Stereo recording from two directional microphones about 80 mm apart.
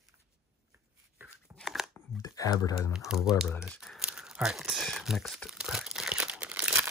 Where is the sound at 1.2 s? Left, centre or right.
Right.